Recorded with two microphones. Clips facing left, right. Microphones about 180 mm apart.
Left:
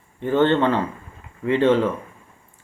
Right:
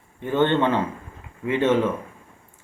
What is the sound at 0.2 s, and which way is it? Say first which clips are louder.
Speech: left 2 dB; 15° right (ahead or behind).